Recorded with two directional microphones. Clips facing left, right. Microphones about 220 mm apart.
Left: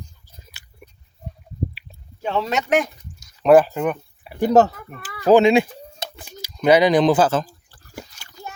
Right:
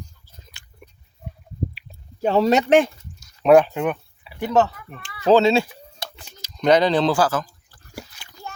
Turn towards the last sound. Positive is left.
turn(degrees=25)  # may be behind; listen again after turning